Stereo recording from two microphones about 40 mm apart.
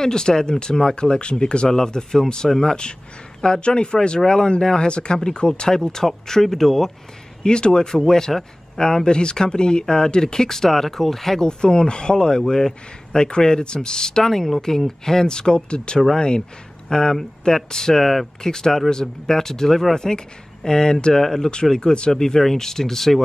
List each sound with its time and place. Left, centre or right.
0.0 s speech: centre
7.4 s speech: left
11.4 s speech: left